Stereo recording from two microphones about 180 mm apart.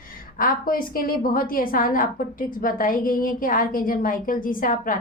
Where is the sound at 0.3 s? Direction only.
55° left (ahead or behind).